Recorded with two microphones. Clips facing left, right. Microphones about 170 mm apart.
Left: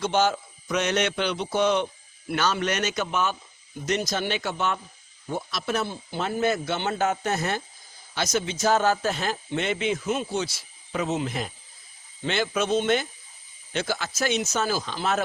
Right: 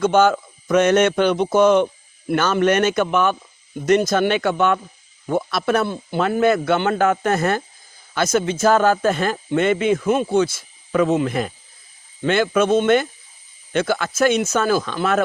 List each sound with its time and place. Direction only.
0.0 s speech: 55° right (ahead or behind)